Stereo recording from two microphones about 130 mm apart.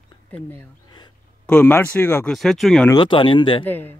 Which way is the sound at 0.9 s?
35° left (ahead or behind).